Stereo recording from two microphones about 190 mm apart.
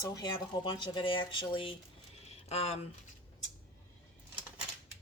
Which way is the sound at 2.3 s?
35° left (ahead or behind).